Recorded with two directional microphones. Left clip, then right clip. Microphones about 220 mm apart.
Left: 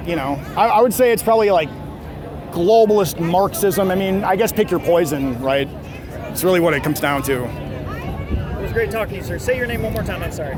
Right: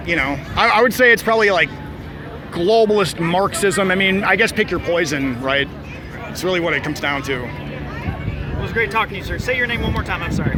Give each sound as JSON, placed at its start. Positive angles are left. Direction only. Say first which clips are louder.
{"t": 0.1, "sound": "speech", "louder": "right 3 dB", "side_deg": 10}
{"t": 6.4, "sound": "speech", "louder": "left 3 dB", "side_deg": 25}
{"t": 8.6, "sound": "speech", "louder": "right 2 dB", "side_deg": -5}